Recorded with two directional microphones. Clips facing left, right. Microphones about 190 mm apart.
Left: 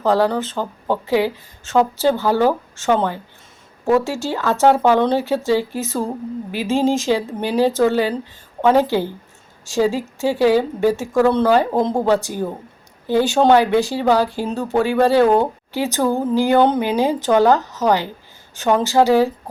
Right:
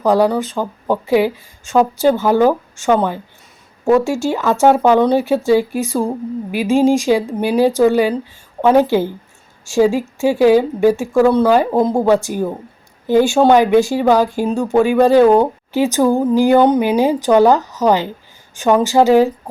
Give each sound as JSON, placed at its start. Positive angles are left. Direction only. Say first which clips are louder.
{"t": 0.0, "sound": "speech", "louder": "right 3 dB", "side_deg": -15}